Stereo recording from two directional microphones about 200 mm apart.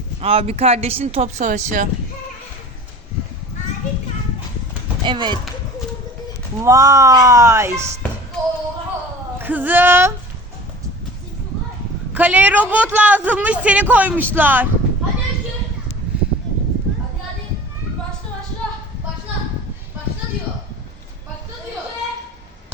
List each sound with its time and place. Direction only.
0.2 s speech: 30° right (ahead or behind)
5.0 s speech: 20° right (ahead or behind)
6.6 s a man's voice: 15° right (ahead or behind)
9.4 s a man's voice: 10° right (ahead or behind)
12.1 s a man's voice: 10° right (ahead or behind)